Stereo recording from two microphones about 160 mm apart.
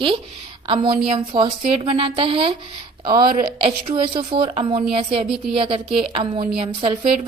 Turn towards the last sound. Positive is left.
turn(degrees=-35)  # may be behind; listen again after turning